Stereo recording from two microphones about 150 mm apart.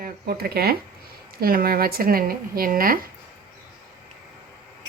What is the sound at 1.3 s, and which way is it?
Speech, 80° right.